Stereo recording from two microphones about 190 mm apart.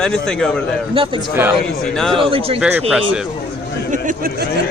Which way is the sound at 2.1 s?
30° right (ahead or behind).